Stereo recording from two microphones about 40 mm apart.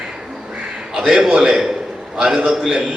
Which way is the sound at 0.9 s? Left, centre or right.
Centre.